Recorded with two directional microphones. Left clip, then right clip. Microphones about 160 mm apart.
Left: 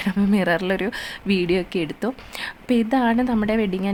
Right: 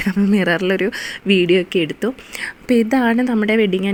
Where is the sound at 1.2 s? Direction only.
45° left (ahead or behind).